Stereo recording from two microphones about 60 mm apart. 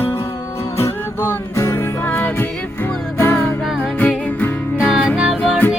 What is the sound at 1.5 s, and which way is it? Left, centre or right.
Music, left.